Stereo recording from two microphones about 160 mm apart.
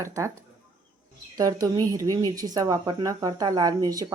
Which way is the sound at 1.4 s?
20° right (ahead or behind).